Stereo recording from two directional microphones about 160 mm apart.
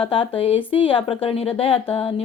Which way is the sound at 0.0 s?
35° left (ahead or behind).